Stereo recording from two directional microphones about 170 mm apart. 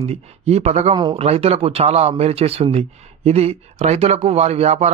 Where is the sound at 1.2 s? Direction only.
40° right (ahead or behind).